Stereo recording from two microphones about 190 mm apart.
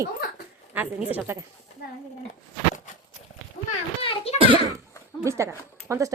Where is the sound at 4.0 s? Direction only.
30° left (ahead or behind).